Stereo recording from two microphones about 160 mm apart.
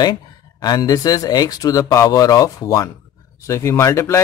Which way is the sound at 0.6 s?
25° left (ahead or behind).